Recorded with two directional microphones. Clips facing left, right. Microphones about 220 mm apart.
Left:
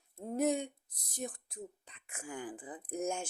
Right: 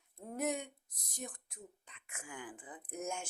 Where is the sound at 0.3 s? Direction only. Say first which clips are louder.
Left 6 dB; 30° left (ahead or behind).